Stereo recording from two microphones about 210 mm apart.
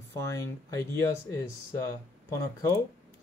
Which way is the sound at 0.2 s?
15° left (ahead or behind).